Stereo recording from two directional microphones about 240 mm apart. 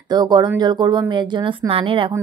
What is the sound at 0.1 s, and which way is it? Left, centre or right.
Speech, centre.